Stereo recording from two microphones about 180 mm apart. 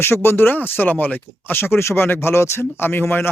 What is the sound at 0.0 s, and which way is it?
Speech, 15° left (ahead or behind).